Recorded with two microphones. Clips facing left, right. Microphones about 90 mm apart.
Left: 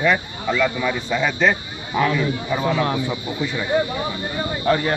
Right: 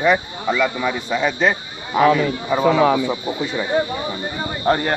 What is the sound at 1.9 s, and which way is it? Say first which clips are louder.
Speech: right 5 dB; 70° right (ahead or behind).